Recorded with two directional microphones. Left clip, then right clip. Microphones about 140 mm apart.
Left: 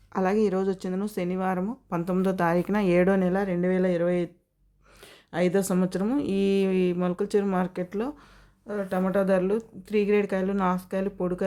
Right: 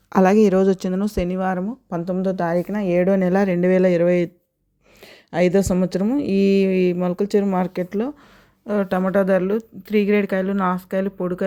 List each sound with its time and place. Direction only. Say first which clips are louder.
0.1 s a woman's voice: right 9 dB; 55° right (ahead or behind); by 1.6 s 35° right (ahead or behind)
1.6 s speech: right 4 dB; 15° right (ahead or behind)
3.2 s a woman's voice: right 7 dB; 45° right (ahead or behind)
8.6 s speech: right 9 dB; 85° right
9.0 s a woman's voice: right 4 dB; 45° right (ahead or behind); by 11.4 s 25° right (ahead or behind)